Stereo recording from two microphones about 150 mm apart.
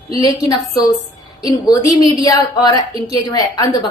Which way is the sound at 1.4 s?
25° left (ahead or behind).